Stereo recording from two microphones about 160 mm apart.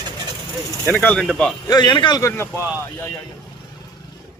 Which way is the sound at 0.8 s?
10° left (ahead or behind).